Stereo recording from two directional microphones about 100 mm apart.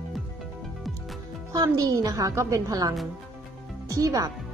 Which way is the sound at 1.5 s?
35° right (ahead or behind).